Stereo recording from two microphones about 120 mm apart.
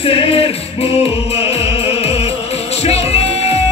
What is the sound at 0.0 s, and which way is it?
Music, 50° left (ahead or behind).